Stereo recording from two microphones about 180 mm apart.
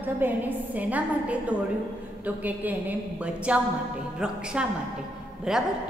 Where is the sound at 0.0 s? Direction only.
10° right (ahead or behind).